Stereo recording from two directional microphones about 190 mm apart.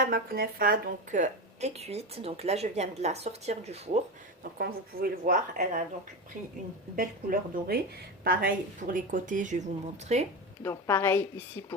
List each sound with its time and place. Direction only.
0.0 s a woman's voice: 50° right (ahead or behind); by 4.0 s 35° right (ahead or behind)
4.5 s speech: 55° right (ahead or behind)
6.9 s a woman's voice: 45° right (ahead or behind)
10.6 s a woman's voice: 15° left (ahead or behind)